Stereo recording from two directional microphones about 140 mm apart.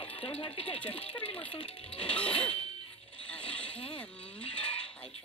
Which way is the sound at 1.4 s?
10° left (ahead or behind).